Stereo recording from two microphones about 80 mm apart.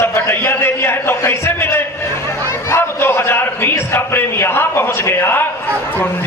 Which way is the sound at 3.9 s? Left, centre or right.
Left.